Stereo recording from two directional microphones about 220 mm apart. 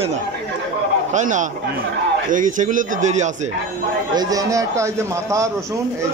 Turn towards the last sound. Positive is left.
turn(degrees=-15)  # may be behind; listen again after turning